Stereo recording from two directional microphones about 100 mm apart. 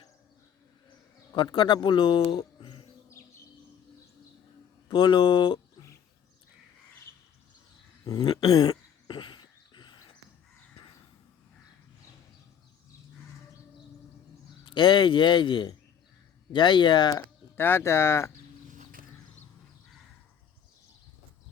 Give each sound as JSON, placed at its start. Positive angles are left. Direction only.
{"t": 0.9, "sound": "speech", "side_deg": 45}
{"t": 2.6, "sound": "a sound", "side_deg": 55}
{"t": 4.9, "sound": "speech", "side_deg": 50}
{"t": 8.0, "sound": "a sound", "side_deg": 45}
{"t": 14.6, "sound": "speech", "side_deg": 50}
{"t": 17.6, "sound": "speech", "side_deg": 25}